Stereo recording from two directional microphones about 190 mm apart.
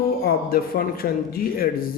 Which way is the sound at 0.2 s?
50° left (ahead or behind).